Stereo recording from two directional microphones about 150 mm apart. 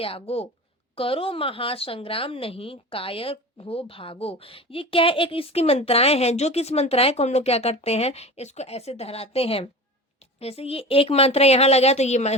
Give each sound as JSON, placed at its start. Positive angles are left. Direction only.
{"t": 0.0, "sound": "speech", "side_deg": 40}